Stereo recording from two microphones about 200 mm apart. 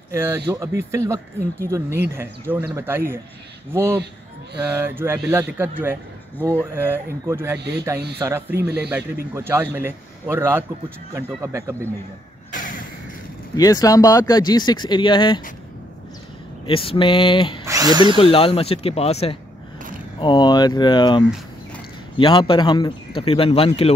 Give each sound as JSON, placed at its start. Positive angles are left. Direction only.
{"t": 0.1, "sound": "a man's voice", "side_deg": -10}
{"t": 7.5, "sound": "speech", "side_deg": -55}
{"t": 8.2, "sound": "a man's voice", "side_deg": -10}
{"t": 12.5, "sound": "a sound", "side_deg": 40}
{"t": 13.6, "sound": "speech", "side_deg": 20}
{"t": 16.6, "sound": "speech", "side_deg": 25}
{"t": 17.6, "sound": "drill", "side_deg": -20}
{"t": 18.1, "sound": "speech", "side_deg": 30}